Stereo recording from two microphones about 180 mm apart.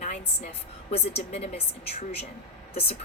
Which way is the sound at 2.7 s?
35° left (ahead or behind).